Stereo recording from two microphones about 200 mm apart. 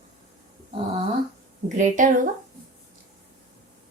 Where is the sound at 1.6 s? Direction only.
35° right (ahead or behind).